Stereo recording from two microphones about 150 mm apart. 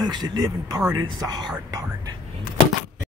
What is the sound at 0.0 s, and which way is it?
Speech, 30° right (ahead or behind).